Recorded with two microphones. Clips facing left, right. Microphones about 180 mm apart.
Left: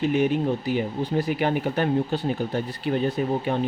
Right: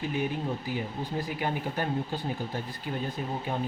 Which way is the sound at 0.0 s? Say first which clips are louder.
Left 9 dB; 75° left (ahead or behind).